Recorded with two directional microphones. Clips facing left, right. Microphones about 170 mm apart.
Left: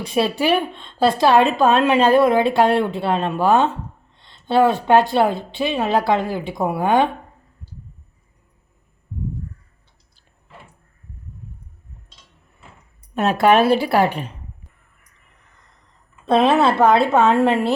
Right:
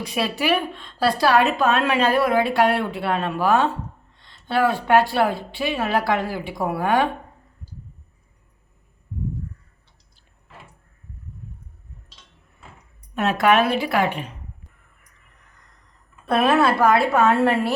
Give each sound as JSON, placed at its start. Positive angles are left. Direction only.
{"t": 0.0, "sound": "a woman's voice", "side_deg": 30}
{"t": 13.1, "sound": "a woman's voice", "side_deg": 30}
{"t": 16.2, "sound": "a woman's voice", "side_deg": 20}